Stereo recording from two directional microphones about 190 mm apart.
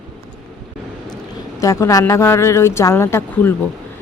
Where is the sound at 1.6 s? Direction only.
15° left (ahead or behind).